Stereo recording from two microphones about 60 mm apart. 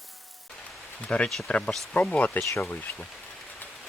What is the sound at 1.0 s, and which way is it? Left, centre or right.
Speech, centre.